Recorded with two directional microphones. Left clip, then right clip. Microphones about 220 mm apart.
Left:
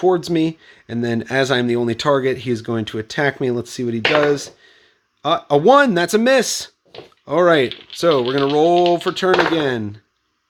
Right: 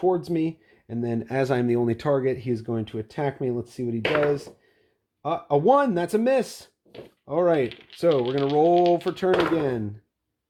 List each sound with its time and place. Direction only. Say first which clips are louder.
0.0 s speech: left 7 dB; 20° left (ahead or behind)
5.2 s speech: left 7 dB; 20° left (ahead or behind)